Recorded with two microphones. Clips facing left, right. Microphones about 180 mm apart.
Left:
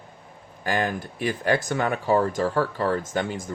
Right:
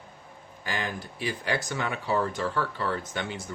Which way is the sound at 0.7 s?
50° left (ahead or behind).